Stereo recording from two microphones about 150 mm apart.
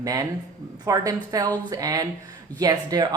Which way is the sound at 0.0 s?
25° right (ahead or behind).